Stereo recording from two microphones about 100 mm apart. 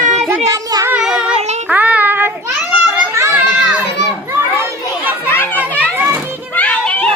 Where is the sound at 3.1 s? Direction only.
30° right (ahead or behind).